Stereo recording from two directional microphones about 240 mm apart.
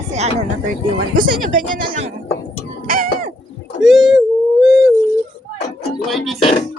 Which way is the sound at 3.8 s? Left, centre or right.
Centre.